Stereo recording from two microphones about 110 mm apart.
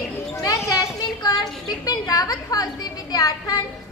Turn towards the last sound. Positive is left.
turn(degrees=35)  # may be behind; listen again after turning